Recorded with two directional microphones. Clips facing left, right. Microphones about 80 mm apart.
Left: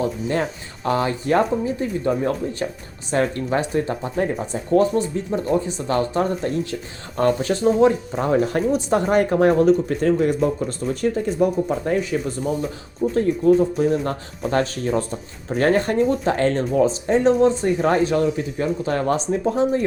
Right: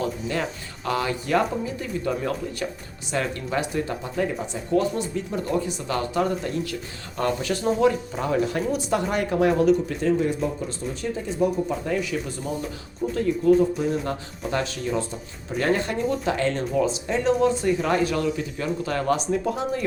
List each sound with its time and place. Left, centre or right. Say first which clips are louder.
0.0 s speech: left 4 dB; left